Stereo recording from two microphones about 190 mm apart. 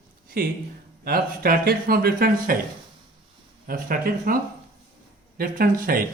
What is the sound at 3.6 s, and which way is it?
Speech, 50° right (ahead or behind).